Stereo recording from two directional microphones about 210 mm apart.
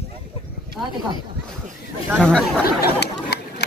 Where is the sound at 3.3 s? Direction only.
50° left (ahead or behind).